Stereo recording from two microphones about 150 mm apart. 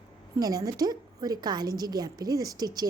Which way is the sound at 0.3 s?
25° right (ahead or behind).